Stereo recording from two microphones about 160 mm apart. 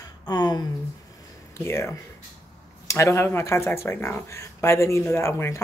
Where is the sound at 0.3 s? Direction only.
25° left (ahead or behind).